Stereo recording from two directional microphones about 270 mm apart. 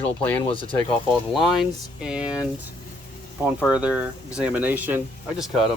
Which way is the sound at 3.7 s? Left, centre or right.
Centre.